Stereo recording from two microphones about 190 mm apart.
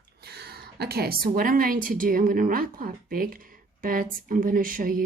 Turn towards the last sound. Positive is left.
turn(degrees=-45)  # may be behind; listen again after turning